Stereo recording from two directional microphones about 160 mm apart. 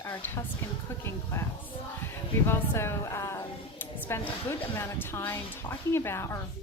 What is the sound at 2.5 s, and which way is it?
A woman's voice, 15° left (ahead or behind).